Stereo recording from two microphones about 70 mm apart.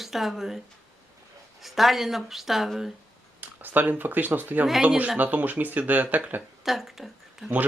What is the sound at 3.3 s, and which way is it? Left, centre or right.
Speech, right.